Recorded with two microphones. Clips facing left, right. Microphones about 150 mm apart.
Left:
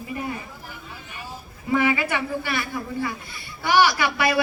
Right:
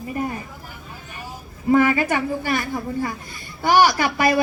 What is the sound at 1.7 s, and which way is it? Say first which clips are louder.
A man's voice: right 5 dB; 45° right (ahead or behind).